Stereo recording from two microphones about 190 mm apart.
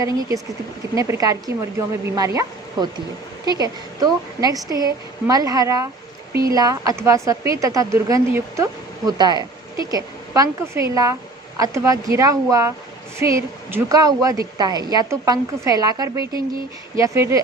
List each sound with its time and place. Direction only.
0.0 s speech: 15° right (ahead or behind)